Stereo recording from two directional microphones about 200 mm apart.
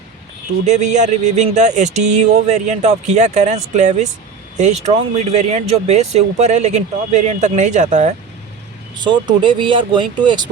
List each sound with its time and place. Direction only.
0.6 s speech: 35° right (ahead or behind)
9.0 s speech: 20° right (ahead or behind)